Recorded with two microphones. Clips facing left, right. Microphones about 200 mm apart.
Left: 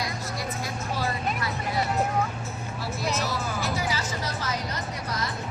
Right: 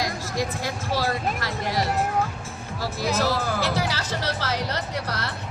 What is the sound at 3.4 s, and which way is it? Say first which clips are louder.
Music: right 4 dB; 75° right (ahead or behind).